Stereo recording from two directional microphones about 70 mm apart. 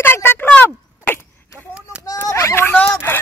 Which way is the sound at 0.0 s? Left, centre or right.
Left.